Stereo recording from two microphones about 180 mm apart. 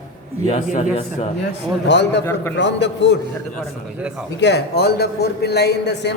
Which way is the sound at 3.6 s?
5° right (ahead or behind).